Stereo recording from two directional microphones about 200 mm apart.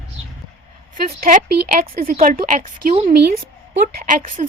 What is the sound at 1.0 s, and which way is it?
A woman's voice, 45° right (ahead or behind).